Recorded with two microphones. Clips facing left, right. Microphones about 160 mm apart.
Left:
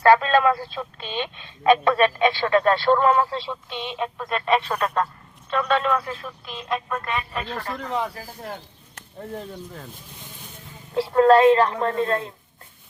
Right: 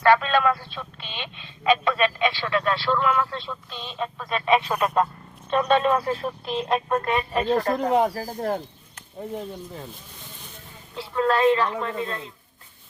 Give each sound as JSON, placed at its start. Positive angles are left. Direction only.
{"t": 0.0, "sound": "speech", "side_deg": 35}
{"t": 3.5, "sound": "speech", "side_deg": 20}
{"t": 3.9, "sound": "speech", "side_deg": 5}
{"t": 5.5, "sound": "speech", "side_deg": -20}
{"t": 7.5, "sound": "speech", "side_deg": -40}
{"t": 11.1, "sound": "a woman's voice", "side_deg": 45}
{"t": 12.0, "sound": "speech", "side_deg": 55}